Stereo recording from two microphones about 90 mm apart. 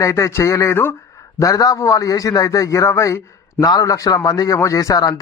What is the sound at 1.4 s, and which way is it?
A man's voice, 40° left (ahead or behind).